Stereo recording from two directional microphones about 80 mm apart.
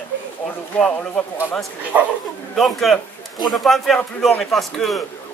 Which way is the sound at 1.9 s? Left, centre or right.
Centre.